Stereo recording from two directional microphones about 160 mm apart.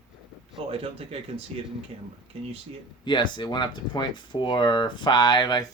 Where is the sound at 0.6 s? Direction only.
35° right (ahead or behind).